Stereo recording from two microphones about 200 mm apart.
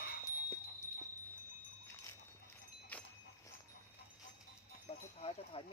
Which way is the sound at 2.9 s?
5° left (ahead or behind).